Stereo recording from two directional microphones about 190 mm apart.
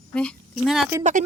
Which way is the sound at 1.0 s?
40° right (ahead or behind).